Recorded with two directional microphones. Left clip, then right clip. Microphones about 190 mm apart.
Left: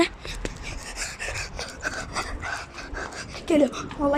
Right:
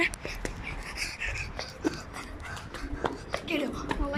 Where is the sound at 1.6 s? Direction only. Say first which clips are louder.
Left 2 dB; 45° left (ahead or behind).